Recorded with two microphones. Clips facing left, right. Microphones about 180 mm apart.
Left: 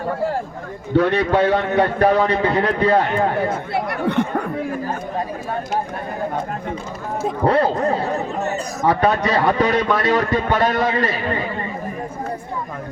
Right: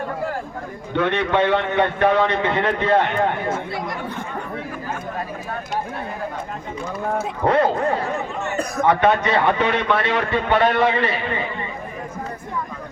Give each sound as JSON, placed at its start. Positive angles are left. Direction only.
{"t": 0.9, "sound": "a man's voice", "side_deg": 35}
{"t": 3.7, "sound": "speech", "side_deg": 65}
{"t": 7.3, "sound": "a man's voice", "side_deg": 35}